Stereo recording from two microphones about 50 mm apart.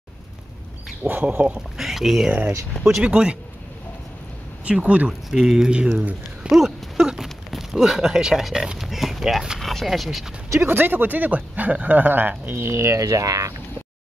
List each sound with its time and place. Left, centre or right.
1.0 s speech: right
1.8 s speech: centre
2.8 s speech: centre
4.8 s speech: right
5.3 s speech: centre
6.5 s a sound: centre
7.5 s speech: centre
9.6 s speech: centre
10.7 s speech: right
12.5 s speech: right